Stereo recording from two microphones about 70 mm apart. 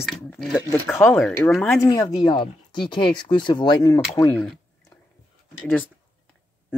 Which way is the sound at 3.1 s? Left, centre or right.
Left.